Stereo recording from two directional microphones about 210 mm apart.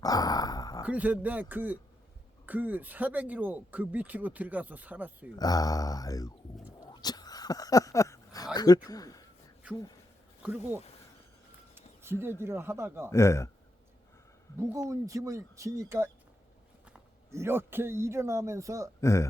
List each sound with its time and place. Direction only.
0.0 s a sound: 15° left (ahead or behind)
0.9 s speech: 5° right (ahead or behind)
5.4 s mantra: 15° left (ahead or behind)
6.7 s a sound: 20° left (ahead or behind)
8.5 s speech: 20° left (ahead or behind)
8.9 s a sound: 15° left (ahead or behind)
10.4 s speech: 10° right (ahead or behind)
13.1 s mantra: 15° left (ahead or behind)
14.6 s speech: 15° right (ahead or behind)
18.9 s mantra: 15° left (ahead or behind)